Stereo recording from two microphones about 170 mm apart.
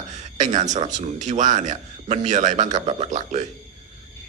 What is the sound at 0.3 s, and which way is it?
Speech, 45° right (ahead or behind).